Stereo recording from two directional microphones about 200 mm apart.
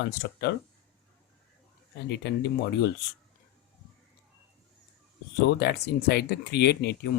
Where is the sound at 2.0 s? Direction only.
55° left (ahead or behind).